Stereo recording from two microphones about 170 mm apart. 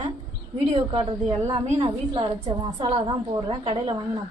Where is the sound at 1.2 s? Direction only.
15° right (ahead or behind).